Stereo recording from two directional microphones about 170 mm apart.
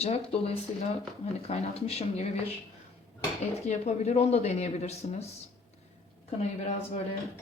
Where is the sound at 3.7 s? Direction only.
40° left (ahead or behind).